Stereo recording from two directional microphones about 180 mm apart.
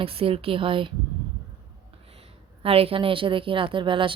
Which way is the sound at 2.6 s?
30° right (ahead or behind).